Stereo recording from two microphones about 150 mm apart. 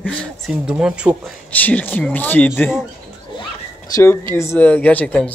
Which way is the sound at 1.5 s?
10° left (ahead or behind).